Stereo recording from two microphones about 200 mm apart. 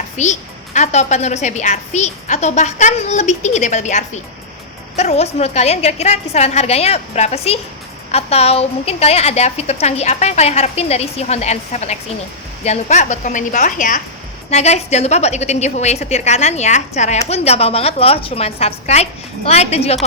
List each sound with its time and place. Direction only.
0.2 s a woman's voice: 35° left (ahead or behind)